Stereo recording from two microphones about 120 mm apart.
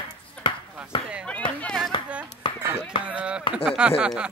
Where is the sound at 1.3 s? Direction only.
10° left (ahead or behind).